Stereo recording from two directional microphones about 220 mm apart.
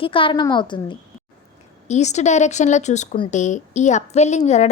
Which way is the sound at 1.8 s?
30° left (ahead or behind).